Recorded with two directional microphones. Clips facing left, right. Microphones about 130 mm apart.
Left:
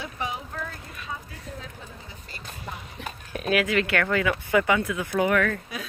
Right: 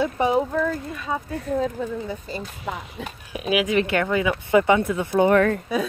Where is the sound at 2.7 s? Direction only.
90° right.